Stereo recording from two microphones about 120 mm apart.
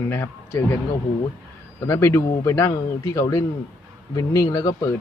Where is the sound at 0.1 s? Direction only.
20° left (ahead or behind).